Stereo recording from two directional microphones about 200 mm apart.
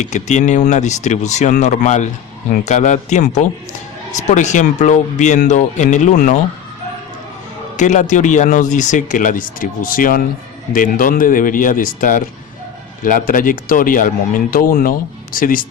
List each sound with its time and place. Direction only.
0.0 s speech: 35° left (ahead or behind)
7.8 s speech: 35° left (ahead or behind)